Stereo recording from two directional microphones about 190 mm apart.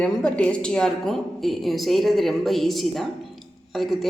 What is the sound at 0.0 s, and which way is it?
A woman's voice, 5° left (ahead or behind).